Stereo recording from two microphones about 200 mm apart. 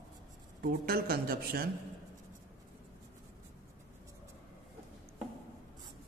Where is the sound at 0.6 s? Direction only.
50° right (ahead or behind).